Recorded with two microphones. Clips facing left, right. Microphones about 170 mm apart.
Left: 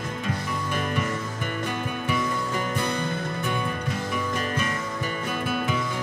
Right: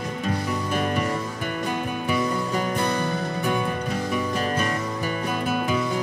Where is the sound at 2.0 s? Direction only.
40° right (ahead or behind).